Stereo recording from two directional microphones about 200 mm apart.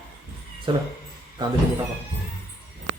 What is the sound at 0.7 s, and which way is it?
Speech, 25° right (ahead or behind).